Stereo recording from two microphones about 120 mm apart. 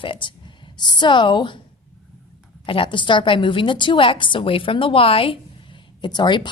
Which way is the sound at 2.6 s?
45° left (ahead or behind).